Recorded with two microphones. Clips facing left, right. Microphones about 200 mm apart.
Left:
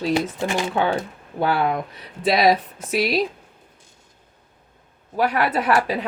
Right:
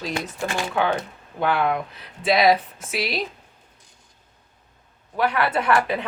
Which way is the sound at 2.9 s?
40° left (ahead or behind).